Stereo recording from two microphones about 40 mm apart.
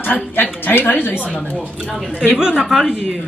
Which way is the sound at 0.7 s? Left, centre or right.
Left.